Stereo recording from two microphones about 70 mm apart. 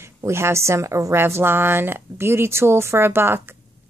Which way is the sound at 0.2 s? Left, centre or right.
Right.